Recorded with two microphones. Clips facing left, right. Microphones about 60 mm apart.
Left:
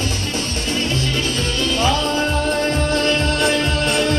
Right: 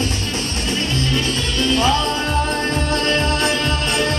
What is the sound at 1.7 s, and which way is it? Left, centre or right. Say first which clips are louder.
Music: even; right.